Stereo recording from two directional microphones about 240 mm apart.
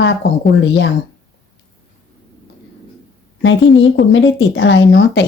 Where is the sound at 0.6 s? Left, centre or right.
Left.